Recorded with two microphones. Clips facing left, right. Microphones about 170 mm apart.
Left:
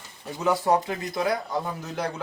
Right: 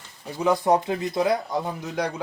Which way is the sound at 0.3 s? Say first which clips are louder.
Right 2 dB; 15° right (ahead or behind).